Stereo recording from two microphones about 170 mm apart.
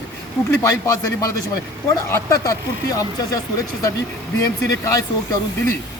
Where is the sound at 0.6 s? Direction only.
20° left (ahead or behind).